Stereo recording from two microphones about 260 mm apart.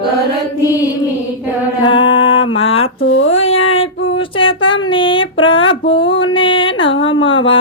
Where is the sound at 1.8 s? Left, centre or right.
Centre.